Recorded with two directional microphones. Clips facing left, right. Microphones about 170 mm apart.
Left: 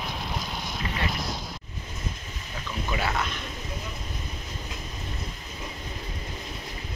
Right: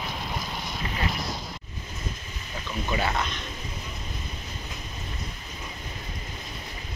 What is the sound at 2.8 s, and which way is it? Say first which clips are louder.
Speech: right 1 dB; centre (ahead or behind).